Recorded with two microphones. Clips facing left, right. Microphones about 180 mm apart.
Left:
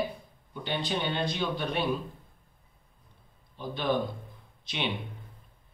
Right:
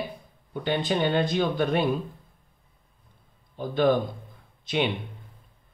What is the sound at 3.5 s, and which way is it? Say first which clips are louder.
Speech: right 11 dB; 50° right (ahead or behind).